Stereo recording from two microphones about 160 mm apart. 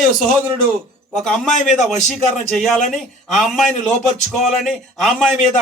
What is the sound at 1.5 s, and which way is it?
Speech, 50° left (ahead or behind).